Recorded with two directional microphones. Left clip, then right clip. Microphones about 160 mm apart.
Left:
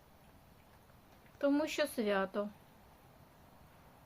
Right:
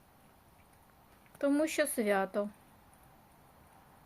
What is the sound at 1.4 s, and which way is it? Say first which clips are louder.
Speech: right 3 dB; 25° right (ahead or behind).